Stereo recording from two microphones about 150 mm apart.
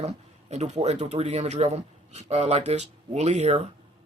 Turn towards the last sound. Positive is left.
turn(degrees=-50)  # may be behind; listen again after turning